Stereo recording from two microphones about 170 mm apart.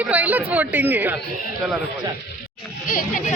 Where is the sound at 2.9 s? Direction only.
55° left (ahead or behind).